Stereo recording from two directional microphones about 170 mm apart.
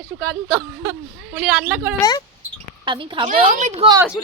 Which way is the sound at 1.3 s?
5° right (ahead or behind).